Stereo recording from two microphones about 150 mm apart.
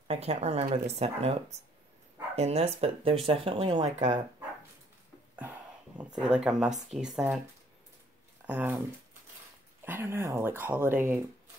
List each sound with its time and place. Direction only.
0.1 s a woman's voice: 45° right (ahead or behind)
2.3 s speech: 45° right (ahead or behind)
5.3 s a sound: 10° right (ahead or behind)
6.2 s speech: 5° right (ahead or behind)
8.5 s speech: 10° right (ahead or behind)
9.8 s speech: 15° right (ahead or behind)